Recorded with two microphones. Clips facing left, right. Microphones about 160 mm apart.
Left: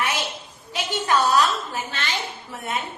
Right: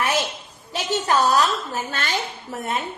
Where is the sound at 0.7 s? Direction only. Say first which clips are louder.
Right 1 dB; 40° right (ahead or behind).